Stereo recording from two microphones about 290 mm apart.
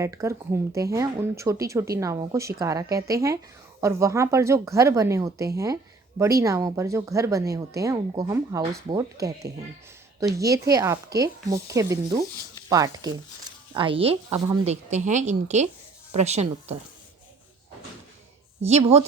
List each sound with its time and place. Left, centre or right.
0.0 s speech: centre
10.3 s speech: centre
18.8 s speech: right